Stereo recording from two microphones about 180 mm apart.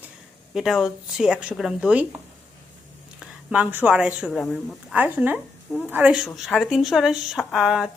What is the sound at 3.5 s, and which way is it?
A woman's voice, 10° right (ahead or behind).